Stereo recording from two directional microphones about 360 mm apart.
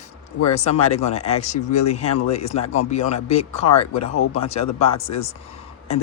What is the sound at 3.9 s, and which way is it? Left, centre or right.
Speech, left.